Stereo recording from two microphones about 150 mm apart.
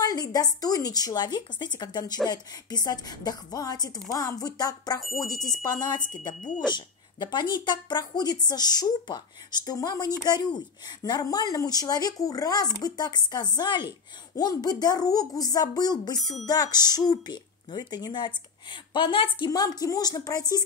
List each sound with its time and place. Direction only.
0.0 s a woman's voice: 25° left (ahead or behind)